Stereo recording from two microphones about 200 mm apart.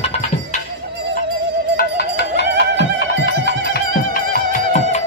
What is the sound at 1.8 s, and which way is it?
Music, 55° left (ahead or behind).